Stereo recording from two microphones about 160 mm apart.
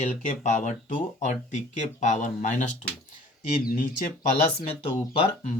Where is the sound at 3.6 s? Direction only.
60° left (ahead or behind).